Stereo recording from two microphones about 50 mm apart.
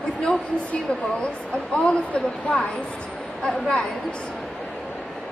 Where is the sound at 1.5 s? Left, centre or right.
Left.